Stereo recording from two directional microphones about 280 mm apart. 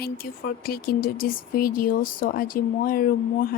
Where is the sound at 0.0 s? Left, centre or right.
Left.